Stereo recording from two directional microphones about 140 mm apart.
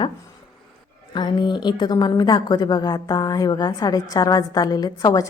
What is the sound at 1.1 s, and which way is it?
A woman's voice, 35° left (ahead or behind).